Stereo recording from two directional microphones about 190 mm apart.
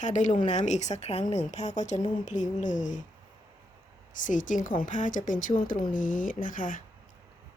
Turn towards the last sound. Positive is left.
turn(degrees=45)  # may be behind; listen again after turning